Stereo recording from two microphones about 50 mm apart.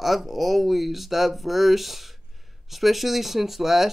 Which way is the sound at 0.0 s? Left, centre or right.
Centre.